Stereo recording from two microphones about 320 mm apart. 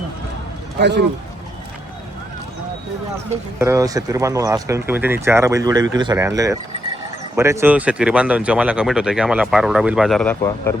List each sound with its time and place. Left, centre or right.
0.8 s a man's voice: right
3.6 s speech: centre